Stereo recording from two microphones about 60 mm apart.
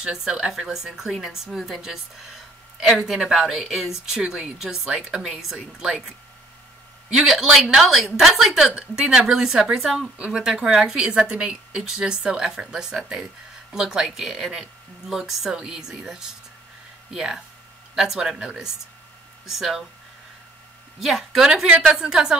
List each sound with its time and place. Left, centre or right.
0.0 s a woman's voice: centre
3.0 s a woman's voice: centre
10.1 s a woman's voice: centre
21.0 s a woman's voice: centre